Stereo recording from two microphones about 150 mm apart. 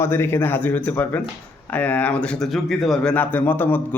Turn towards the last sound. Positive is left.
turn(degrees=10)  # may be behind; listen again after turning